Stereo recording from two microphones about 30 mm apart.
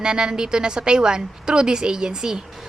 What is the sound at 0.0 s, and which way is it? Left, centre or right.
A woman's voice, right.